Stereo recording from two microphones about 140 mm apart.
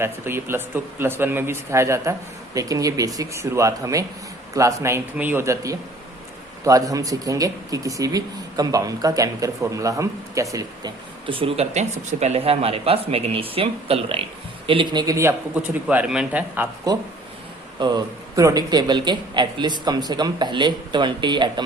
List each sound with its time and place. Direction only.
0.0 s speech: 15° right (ahead or behind)
11.3 s a man's voice: 40° right (ahead or behind)
15.0 s speech: 20° right (ahead or behind)
17.7 s a man's voice: 30° right (ahead or behind)